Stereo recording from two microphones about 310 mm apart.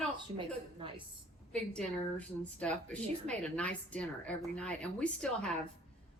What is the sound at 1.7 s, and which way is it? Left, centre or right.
Speech, centre.